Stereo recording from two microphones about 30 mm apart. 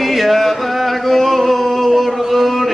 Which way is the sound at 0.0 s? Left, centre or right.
Centre.